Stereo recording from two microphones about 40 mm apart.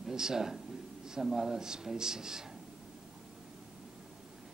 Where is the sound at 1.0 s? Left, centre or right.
Centre.